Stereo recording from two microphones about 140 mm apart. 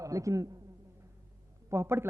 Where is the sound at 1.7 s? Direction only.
20° right (ahead or behind).